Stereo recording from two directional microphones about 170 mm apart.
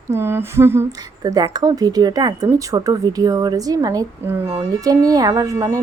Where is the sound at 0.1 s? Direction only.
15° right (ahead or behind).